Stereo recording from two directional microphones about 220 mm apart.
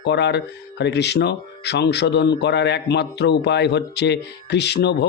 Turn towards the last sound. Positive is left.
turn(degrees=50)  # may be behind; listen again after turning